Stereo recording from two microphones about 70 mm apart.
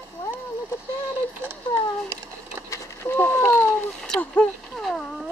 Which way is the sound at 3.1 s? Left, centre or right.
Left.